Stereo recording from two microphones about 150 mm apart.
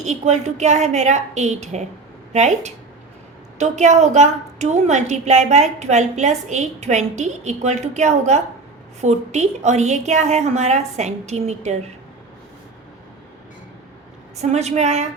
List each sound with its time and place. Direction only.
0.0 s a woman's voice: 50° right (ahead or behind)
14.5 s a woman's voice: 45° right (ahead or behind)